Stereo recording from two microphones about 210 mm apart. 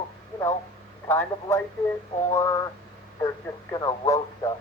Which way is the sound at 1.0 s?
10° left (ahead or behind).